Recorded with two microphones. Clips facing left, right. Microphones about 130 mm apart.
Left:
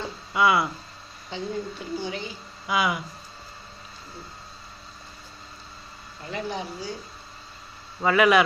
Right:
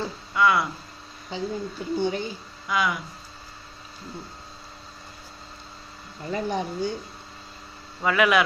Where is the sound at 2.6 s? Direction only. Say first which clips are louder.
Left 1 dB; 10° left (ahead or behind).